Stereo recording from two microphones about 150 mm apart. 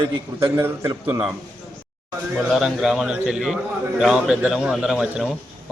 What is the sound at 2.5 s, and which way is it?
A man's voice, 5° right (ahead or behind).